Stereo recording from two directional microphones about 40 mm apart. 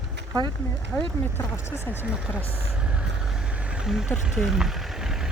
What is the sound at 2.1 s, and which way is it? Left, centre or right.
Speech, right.